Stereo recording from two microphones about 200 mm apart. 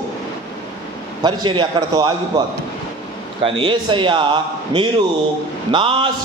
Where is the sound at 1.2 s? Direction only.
20° right (ahead or behind).